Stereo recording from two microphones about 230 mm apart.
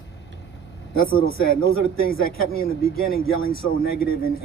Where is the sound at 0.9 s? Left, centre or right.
Left.